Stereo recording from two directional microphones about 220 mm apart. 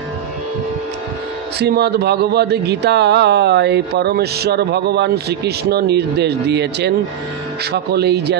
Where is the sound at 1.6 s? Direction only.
50° right (ahead or behind).